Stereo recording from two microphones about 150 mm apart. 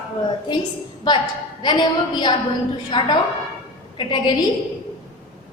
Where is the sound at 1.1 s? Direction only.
30° left (ahead or behind).